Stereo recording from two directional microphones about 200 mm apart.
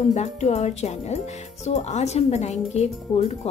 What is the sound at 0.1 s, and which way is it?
Speech, 35° left (ahead or behind).